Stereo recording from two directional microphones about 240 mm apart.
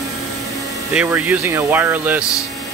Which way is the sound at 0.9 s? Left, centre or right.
Centre.